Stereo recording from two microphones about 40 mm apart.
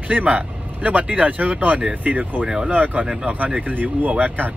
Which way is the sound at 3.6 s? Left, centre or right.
Right.